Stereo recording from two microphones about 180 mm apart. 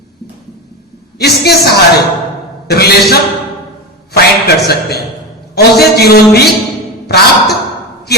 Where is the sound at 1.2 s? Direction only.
65° left (ahead or behind).